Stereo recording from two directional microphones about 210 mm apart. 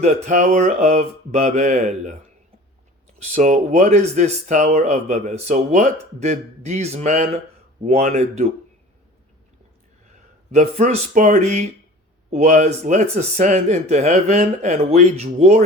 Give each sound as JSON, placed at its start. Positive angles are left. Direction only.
{"t": 0.0, "sound": "speech", "side_deg": -35}
{"t": 3.2, "sound": "speech", "side_deg": -35}
{"t": 10.5, "sound": "speech", "side_deg": -35}